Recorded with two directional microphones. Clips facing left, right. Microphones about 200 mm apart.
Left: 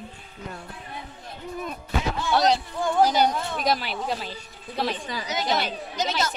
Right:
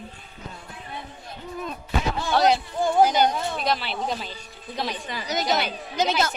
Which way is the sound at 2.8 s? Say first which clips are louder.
Right 3 dB; 25° right (ahead or behind).